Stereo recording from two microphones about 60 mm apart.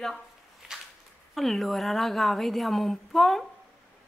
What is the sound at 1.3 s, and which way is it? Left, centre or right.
A woman's voice, centre.